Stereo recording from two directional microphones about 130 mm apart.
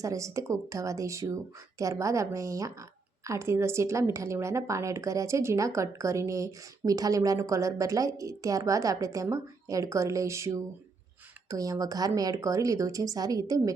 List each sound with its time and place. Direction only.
0.0 s a woman's voice: 25° right (ahead or behind)